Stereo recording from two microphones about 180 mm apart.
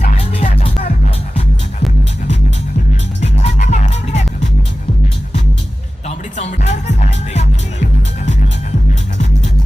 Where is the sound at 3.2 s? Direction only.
40° left (ahead or behind).